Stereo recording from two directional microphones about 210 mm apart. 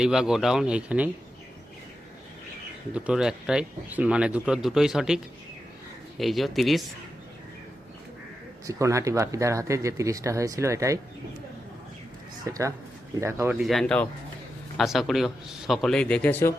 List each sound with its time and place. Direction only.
0.0 s speech: 5° right (ahead or behind)
2.9 s speech: 5° right (ahead or behind)
8.6 s speech: 15° right (ahead or behind)
12.5 s speech: 15° right (ahead or behind)
13.6 s speech: centre (ahead or behind)